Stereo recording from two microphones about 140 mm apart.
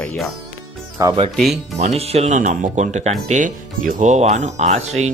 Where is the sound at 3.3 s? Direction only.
70° right (ahead or behind).